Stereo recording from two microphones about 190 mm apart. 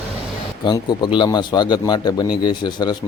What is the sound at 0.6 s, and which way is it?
A man's voice, 25° left (ahead or behind).